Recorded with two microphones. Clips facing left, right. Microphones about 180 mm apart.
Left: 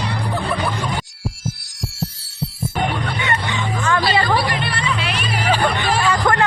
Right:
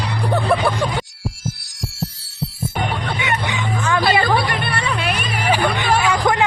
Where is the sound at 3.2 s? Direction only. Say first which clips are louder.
Even; 10° right (ahead or behind).